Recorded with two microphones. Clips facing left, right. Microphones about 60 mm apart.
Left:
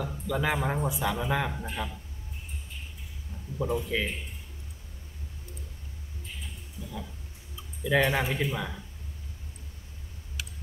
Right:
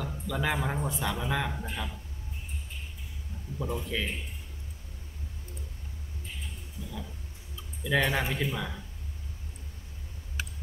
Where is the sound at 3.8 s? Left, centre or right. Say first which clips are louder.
Left 3 dB; centre.